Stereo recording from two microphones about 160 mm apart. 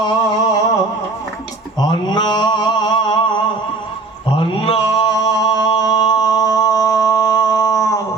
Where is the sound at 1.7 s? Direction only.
25° left (ahead or behind).